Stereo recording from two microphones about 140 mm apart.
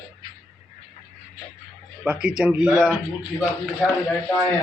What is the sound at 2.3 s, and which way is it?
Speech, 10° right (ahead or behind).